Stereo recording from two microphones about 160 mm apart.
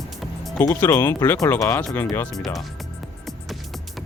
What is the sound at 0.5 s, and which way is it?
Speech, 20° left (ahead or behind).